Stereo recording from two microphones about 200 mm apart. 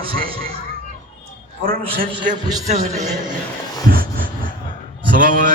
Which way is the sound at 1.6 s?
45° right (ahead or behind).